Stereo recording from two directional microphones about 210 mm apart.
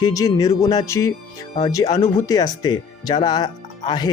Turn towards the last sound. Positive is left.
turn(degrees=20)  # may be behind; listen again after turning